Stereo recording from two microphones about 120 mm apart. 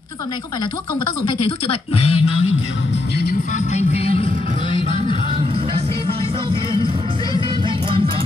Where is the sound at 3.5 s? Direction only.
80° left; by 4.3 s 55° left (ahead or behind).